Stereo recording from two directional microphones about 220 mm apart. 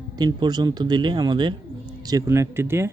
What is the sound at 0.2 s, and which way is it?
Speech, 20° right (ahead or behind).